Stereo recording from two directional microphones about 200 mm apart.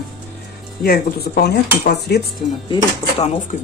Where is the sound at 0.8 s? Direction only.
50° left (ahead or behind).